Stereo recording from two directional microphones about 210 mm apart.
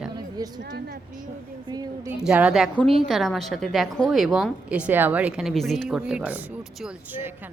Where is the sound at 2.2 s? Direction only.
5° right (ahead or behind).